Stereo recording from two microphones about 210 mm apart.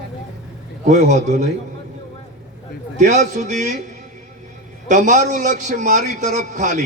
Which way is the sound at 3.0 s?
35° right (ahead or behind).